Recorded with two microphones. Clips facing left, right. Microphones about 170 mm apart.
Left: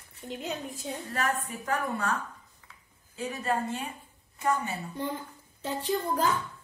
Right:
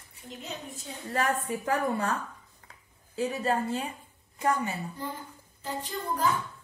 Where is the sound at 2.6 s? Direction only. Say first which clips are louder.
Right 2 dB; 50° right (ahead or behind).